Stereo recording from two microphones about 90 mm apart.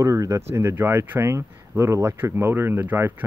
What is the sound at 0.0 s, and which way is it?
Speech, 35° right (ahead or behind).